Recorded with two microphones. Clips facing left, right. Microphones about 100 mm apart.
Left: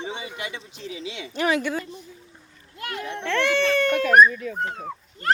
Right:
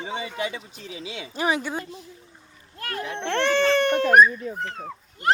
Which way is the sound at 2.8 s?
35° right (ahead or behind).